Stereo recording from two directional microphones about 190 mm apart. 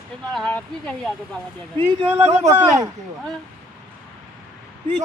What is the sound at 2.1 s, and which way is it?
Speech, 35° right (ahead or behind).